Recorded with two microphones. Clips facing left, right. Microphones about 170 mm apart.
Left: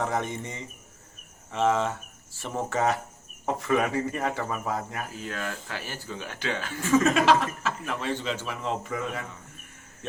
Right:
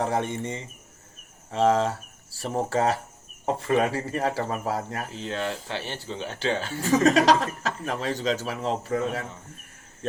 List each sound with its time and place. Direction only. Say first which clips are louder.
0.0 s speech: right 3 dB; 30° right (ahead or behind)